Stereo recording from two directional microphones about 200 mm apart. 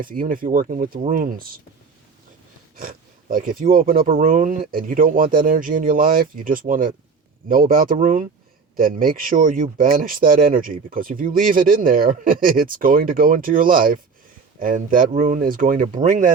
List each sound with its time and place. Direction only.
0.0 s speech: 45° right (ahead or behind)
2.7 s speech: 45° right (ahead or behind)